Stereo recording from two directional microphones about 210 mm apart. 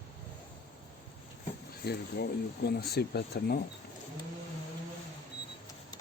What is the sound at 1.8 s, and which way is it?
Speech, 50° left (ahead or behind).